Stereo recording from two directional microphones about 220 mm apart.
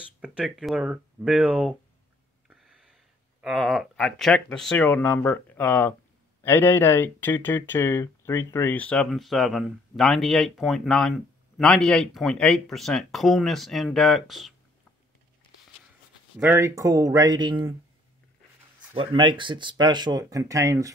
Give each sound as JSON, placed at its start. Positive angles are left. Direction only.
{"t": 0.2, "sound": "speech", "side_deg": -5}
{"t": 16.3, "sound": "speech", "side_deg": -10}
{"t": 18.9, "sound": "speech", "side_deg": -20}